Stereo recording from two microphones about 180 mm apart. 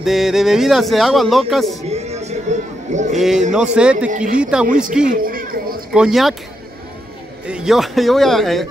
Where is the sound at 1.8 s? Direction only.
35° right (ahead or behind).